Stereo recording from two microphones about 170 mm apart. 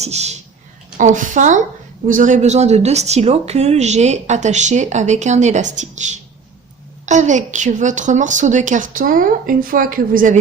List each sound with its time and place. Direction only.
0.0 s speech: 40° right (ahead or behind)